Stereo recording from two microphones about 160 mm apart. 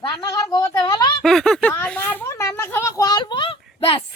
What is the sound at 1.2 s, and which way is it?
Speech, centre (ahead or behind).